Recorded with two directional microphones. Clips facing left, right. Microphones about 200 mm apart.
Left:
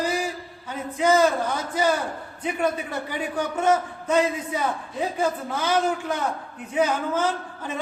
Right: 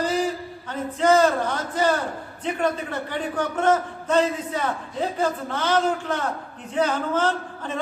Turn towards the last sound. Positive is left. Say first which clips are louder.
# right 2 dB
turn(degrees=10)  # may be behind; listen again after turning